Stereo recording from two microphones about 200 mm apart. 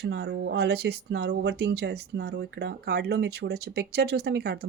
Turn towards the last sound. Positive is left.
turn(degrees=-55)  # may be behind; listen again after turning